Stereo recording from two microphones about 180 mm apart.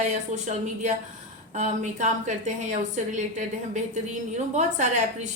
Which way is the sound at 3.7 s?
40° right (ahead or behind).